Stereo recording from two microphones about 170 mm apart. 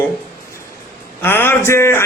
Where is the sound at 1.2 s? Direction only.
10° left (ahead or behind).